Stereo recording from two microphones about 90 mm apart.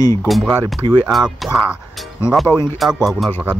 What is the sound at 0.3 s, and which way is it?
A man's voice, centre (ahead or behind).